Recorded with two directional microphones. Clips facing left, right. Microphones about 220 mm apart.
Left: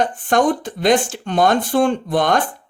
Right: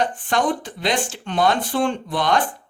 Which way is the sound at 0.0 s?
45° left (ahead or behind).